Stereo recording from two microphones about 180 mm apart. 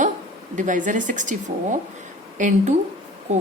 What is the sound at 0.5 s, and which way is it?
A woman's voice, 45° right (ahead or behind).